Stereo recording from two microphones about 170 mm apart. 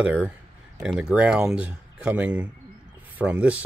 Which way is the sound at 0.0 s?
10° right (ahead or behind).